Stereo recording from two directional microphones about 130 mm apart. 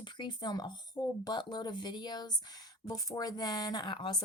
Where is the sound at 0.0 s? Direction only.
35° left (ahead or behind).